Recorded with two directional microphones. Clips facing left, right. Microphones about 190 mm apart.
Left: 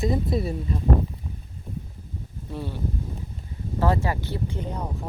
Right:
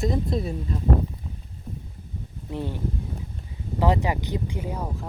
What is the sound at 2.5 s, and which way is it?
Speech, 15° right (ahead or behind).